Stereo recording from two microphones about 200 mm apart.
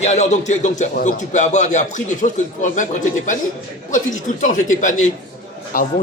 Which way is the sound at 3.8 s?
40° left (ahead or behind).